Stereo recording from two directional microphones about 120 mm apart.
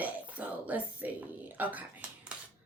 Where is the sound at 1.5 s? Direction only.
15° right (ahead or behind).